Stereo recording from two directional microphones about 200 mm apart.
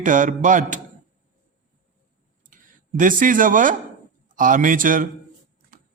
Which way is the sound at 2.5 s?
40° right (ahead or behind).